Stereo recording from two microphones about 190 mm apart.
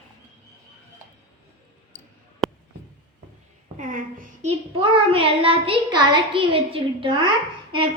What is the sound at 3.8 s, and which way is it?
A child's voice, 45° right (ahead or behind).